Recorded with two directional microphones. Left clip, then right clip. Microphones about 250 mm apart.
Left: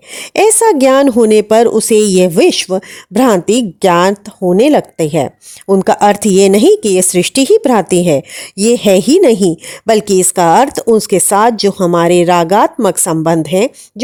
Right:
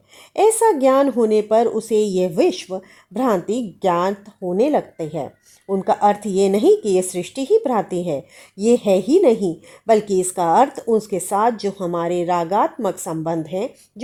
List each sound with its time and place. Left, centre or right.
0.3 s a woman's voice: left